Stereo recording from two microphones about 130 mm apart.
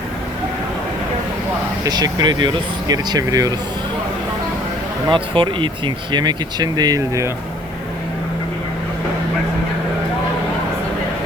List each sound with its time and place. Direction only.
1.8 s speech: 30° right (ahead or behind)
5.0 s speech: 40° right (ahead or behind)